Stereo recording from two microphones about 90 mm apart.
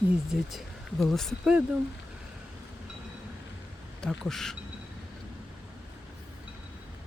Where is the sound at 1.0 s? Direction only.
5° left (ahead or behind).